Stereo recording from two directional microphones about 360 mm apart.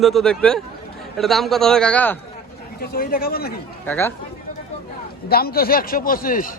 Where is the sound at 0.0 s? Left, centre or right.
Centre.